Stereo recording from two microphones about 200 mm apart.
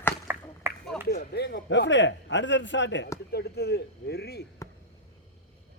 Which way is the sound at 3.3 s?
55° left (ahead or behind).